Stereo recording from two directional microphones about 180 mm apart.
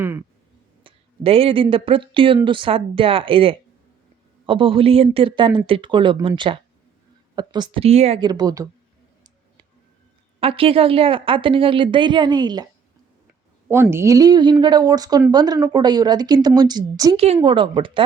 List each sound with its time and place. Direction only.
0.9 s a sound: 30° right (ahead or behind)
1.7 s a woman's voice: 30° right (ahead or behind)
8.2 s a woman's voice: 20° right (ahead or behind)
10.4 s a woman's voice: 30° right (ahead or behind)
13.9 s a woman's voice: 15° right (ahead or behind)